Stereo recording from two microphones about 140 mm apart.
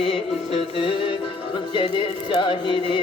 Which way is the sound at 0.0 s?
40° left (ahead or behind).